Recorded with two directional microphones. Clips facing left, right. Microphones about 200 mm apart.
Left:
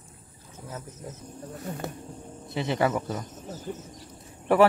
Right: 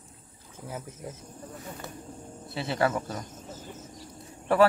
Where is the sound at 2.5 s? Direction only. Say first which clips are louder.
Left 2 dB; 15° left (ahead or behind).